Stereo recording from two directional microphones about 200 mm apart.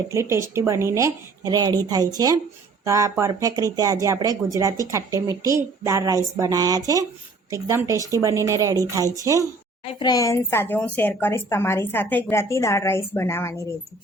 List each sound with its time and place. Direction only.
0.1 s speech: 15° right (ahead or behind)
10.0 s a woman's voice: 20° left (ahead or behind)